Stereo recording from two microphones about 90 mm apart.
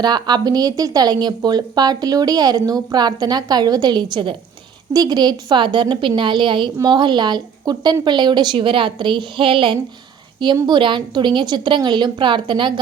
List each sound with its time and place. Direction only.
0.0 s a woman's voice: 50° right (ahead or behind)
4.9 s a woman's voice: 50° right (ahead or behind); by 9.7 s 75° right (ahead or behind)
10.4 s a woman's voice: 60° right (ahead or behind)